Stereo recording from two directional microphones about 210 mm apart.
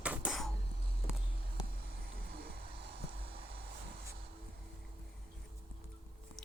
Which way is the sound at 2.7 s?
25° right (ahead or behind).